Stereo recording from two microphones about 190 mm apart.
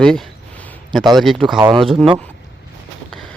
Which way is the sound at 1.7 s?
25° right (ahead or behind).